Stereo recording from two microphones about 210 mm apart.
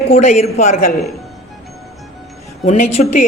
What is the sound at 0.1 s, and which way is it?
Speech, 35° left (ahead or behind).